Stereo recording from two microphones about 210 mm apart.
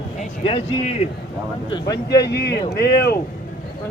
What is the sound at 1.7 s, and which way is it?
Speech, 20° left (ahead or behind).